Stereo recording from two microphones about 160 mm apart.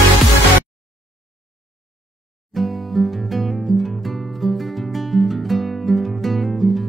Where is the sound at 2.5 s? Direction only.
Centre (ahead or behind).